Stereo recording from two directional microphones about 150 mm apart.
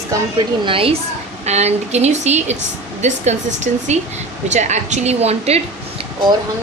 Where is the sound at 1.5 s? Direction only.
45° right (ahead or behind).